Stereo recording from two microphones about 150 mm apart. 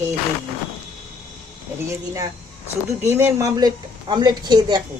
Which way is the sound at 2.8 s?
15° right (ahead or behind).